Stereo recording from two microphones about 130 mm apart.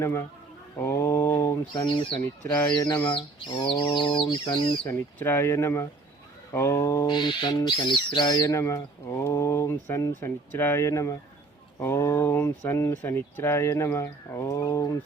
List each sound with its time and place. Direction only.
0.0 s bird: 20° left (ahead or behind)
1.7 s speech: 35° left (ahead or behind)
2.6 s bird: 30° left (ahead or behind)
2.9 s speech: 15° left (ahead or behind)
3.2 s speech: 40° left (ahead or behind)
4.9 s bird: 20° left (ahead or behind)
7.1 s bird: 35° left (ahead or behind)